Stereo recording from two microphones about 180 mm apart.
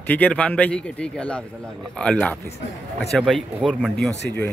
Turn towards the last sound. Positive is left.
turn(degrees=10)  # may be behind; listen again after turning